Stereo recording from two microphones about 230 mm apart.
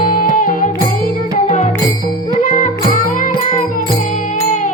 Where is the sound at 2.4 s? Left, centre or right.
Left.